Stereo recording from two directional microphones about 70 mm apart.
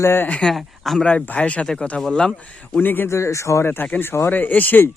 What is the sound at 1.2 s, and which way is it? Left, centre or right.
Speech, left.